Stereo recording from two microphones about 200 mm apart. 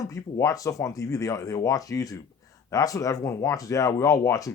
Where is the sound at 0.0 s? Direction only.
15° left (ahead or behind).